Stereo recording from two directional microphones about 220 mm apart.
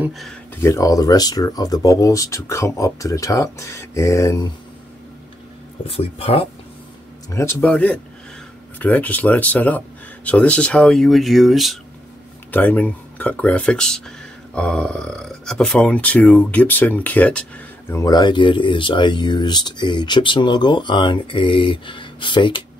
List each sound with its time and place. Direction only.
0.0 s speech: centre (ahead or behind)
0.6 s speech: 15° left (ahead or behind)
5.9 s speech: 25° left (ahead or behind)
7.2 s speech: 10° left (ahead or behind)